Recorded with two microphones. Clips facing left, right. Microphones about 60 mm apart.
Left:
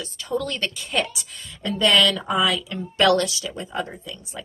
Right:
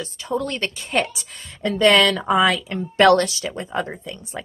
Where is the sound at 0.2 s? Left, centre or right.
Right.